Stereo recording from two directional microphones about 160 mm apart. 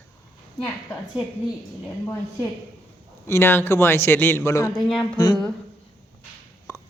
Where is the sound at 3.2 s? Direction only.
15° left (ahead or behind).